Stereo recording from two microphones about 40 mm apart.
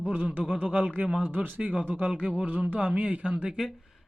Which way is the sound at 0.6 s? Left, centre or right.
Right.